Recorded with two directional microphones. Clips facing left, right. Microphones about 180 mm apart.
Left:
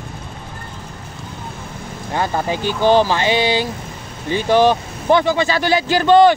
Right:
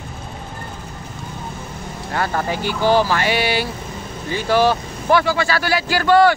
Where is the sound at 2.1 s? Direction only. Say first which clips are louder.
Left 2 dB; 20° left (ahead or behind).